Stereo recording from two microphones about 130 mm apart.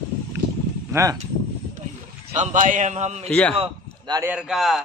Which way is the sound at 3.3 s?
10° left (ahead or behind).